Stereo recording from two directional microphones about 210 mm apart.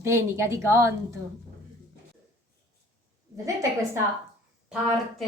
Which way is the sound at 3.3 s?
15° right (ahead or behind).